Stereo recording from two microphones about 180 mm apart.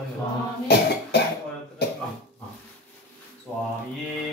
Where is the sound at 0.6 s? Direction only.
65° left (ahead or behind).